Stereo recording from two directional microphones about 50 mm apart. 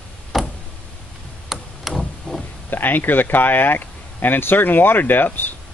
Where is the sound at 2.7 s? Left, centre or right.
Left.